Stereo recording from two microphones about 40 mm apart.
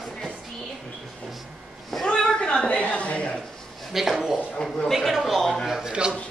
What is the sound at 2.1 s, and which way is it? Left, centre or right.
A woman's voice, left.